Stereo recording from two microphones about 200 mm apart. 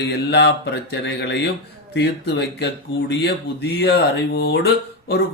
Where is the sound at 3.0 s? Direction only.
55° left (ahead or behind).